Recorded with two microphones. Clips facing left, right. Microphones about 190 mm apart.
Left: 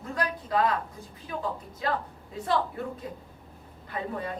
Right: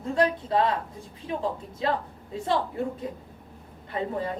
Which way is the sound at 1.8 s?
25° right (ahead or behind).